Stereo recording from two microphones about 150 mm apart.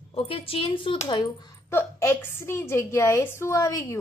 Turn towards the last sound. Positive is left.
turn(degrees=20)  # may be behind; listen again after turning